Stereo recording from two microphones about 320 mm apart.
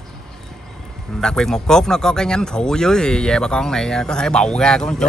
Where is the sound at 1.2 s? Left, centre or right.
Centre.